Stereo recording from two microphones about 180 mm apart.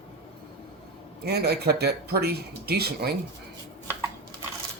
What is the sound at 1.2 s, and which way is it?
Speech, 60° right (ahead or behind).